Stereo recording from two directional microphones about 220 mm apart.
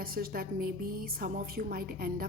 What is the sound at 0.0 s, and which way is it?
A woman's voice, 40° right (ahead or behind).